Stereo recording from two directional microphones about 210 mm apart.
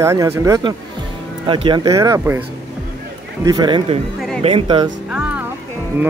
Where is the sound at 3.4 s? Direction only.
20° right (ahead or behind).